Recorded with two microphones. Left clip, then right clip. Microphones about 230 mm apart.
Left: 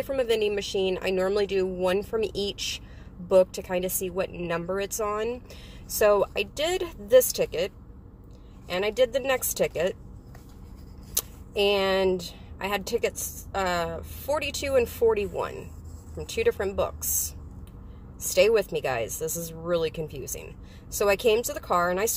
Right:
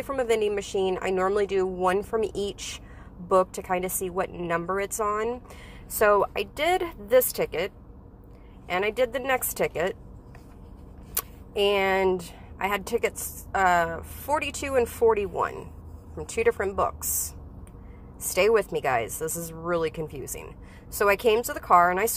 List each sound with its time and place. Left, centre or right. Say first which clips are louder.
0.0 s a woman's voice: even; centre
2.2 s speech: even; right
3.3 s a woman's voice: left 1 dB; centre
11.1 s a woman's voice: even; centre
18.3 s a woman's voice: left 1 dB; centre